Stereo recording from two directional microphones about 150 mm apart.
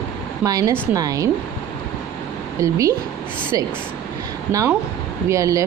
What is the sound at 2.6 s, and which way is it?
Speech, 20° right (ahead or behind).